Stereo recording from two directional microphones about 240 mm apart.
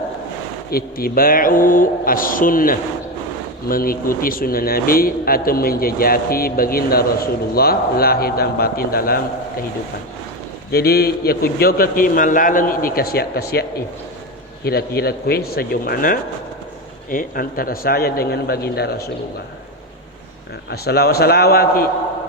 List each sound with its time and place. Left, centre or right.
0.7 s speech: left
10.7 s speech: left
20.7 s speech: left